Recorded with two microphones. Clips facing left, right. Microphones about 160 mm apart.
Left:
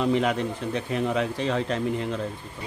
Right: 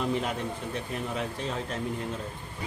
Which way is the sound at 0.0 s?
90° left.